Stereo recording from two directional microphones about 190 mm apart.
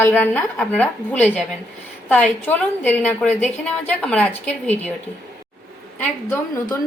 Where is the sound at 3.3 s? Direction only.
35° left (ahead or behind).